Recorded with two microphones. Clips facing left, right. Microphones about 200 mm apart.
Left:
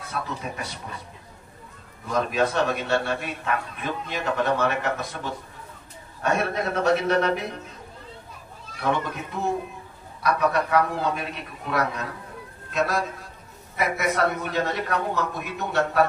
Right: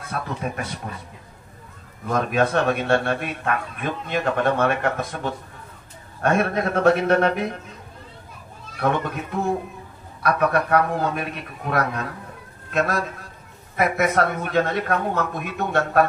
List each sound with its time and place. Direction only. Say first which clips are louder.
0.1 s a man's voice: right 4 dB; 55° right (ahead or behind)
2.0 s a man's voice: right 2 dB; 55° right (ahead or behind)
8.9 s a man's voice: right 3 dB; 55° right (ahead or behind)